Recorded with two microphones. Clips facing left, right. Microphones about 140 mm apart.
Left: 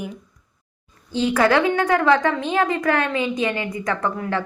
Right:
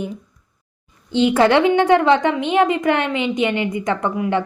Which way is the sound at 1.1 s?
25° right (ahead or behind).